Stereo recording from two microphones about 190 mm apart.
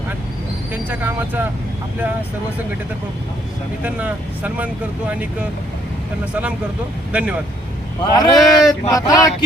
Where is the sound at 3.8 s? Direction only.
10° right (ahead or behind).